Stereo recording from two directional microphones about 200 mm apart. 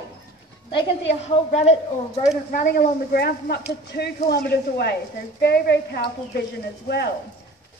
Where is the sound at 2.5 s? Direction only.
50° left (ahead or behind).